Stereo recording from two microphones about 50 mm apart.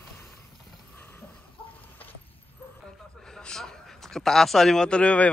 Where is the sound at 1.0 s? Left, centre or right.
Left.